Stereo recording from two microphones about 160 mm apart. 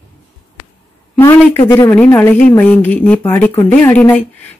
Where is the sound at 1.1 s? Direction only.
15° left (ahead or behind).